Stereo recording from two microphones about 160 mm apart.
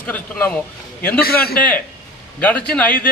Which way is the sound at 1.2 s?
70° left (ahead or behind).